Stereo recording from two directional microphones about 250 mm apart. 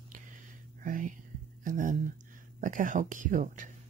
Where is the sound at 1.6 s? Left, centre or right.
Right.